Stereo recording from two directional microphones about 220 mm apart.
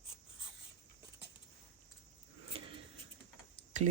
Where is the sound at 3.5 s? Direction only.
35° right (ahead or behind).